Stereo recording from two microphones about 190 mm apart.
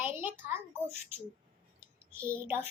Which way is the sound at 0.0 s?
10° right (ahead or behind).